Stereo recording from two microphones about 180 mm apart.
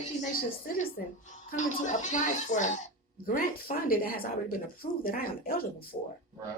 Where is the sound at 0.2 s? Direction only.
55° left (ahead or behind).